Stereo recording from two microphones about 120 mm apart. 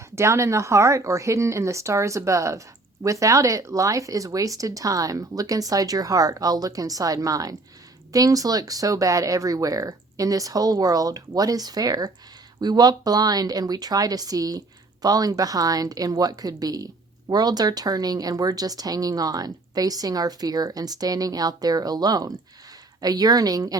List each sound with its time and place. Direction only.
0.0 s a woman's voice: 25° right (ahead or behind)